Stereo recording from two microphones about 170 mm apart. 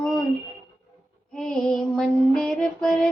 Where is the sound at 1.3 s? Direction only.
5° left (ahead or behind).